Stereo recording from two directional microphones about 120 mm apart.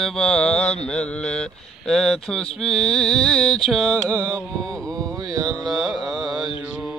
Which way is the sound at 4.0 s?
30° right (ahead or behind).